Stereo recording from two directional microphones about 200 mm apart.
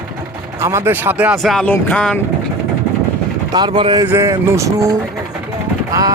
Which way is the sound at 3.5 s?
20° right (ahead or behind).